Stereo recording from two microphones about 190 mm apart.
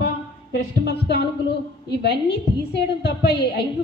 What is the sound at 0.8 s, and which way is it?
A woman's voice, 60° left (ahead or behind).